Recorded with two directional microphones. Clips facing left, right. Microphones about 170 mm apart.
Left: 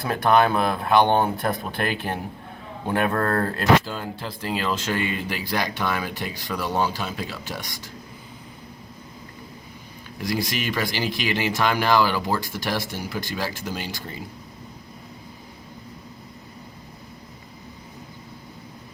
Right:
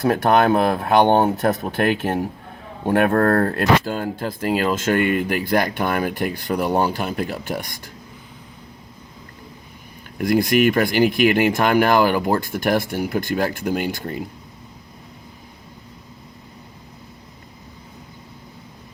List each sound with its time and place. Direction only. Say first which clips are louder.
0.0 s speech: right 3 dB; 45° right (ahead or behind)
10.2 s speech: right 10 dB; 55° right (ahead or behind)